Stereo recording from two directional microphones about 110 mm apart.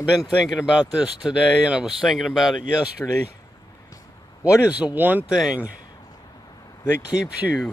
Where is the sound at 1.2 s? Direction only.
10° right (ahead or behind).